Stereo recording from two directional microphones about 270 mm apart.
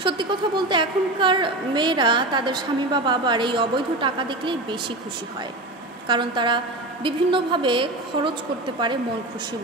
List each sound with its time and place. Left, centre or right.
0.0 s a woman's voice: centre
6.0 s a woman's voice: centre